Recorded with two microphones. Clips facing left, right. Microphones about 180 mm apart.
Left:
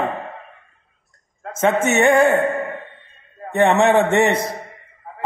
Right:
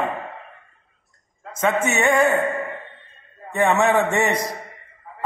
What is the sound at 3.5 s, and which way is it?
Speech, 25° left (ahead or behind).